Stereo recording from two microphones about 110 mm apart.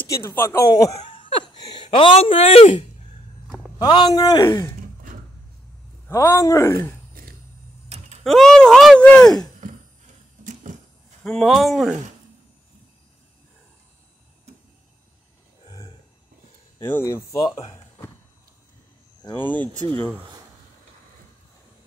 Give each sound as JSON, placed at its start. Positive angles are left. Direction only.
{"t": 0.2, "sound": "speech", "side_deg": 20}
{"t": 0.7, "sound": "a man's voice", "side_deg": 35}
{"t": 1.2, "sound": "a sound", "side_deg": 45}
{"t": 3.7, "sound": "a man's voice", "side_deg": 45}
{"t": 6.0, "sound": "speech", "side_deg": 25}
{"t": 8.2, "sound": "speech", "side_deg": 0}
{"t": 11.2, "sound": "speech", "side_deg": 0}
{"t": 16.8, "sound": "speech", "side_deg": 25}
{"t": 17.4, "sound": "speech", "side_deg": 45}
{"t": 19.3, "sound": "speech", "side_deg": 15}